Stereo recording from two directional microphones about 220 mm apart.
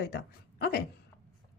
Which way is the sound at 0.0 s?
45° left (ahead or behind).